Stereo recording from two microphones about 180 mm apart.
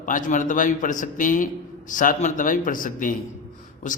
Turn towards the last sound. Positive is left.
turn(degrees=45)  # may be behind; listen again after turning